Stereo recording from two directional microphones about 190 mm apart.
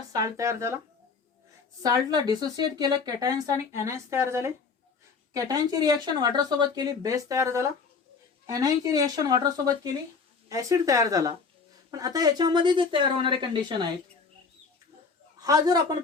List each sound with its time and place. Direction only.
0.1 s speech: 15° right (ahead or behind)
1.8 s speech: 20° right (ahead or behind)
15.4 s speech: 20° right (ahead or behind)